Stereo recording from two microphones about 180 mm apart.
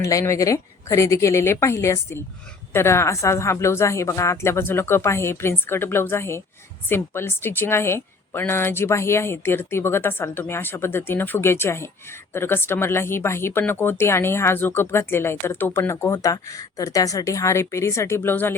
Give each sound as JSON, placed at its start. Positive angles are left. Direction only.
{"t": 0.0, "sound": "a woman's voice", "side_deg": 15}